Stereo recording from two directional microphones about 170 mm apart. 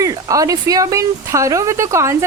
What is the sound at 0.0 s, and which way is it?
A woman's voice, 20° right (ahead or behind).